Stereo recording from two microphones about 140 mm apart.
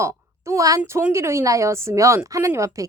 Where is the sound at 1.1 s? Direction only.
20° right (ahead or behind).